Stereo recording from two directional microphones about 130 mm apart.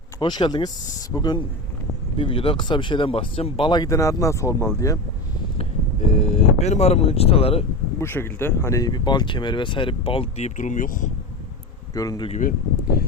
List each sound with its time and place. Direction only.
0.2 s speech: 35° left (ahead or behind)
5.5 s speech: 50° left (ahead or behind)
7.9 s speech: 20° left (ahead or behind); by 11.1 s 90° left
11.9 s speech: 30° left (ahead or behind)